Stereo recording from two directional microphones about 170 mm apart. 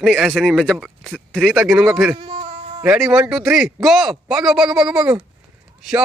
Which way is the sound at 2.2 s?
30° right (ahead or behind).